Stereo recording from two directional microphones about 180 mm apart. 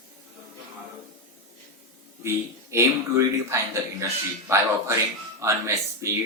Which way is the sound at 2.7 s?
15° right (ahead or behind).